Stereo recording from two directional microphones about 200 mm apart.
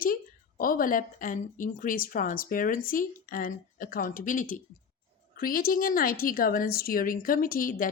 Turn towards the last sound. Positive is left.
turn(degrees=45)  # may be behind; listen again after turning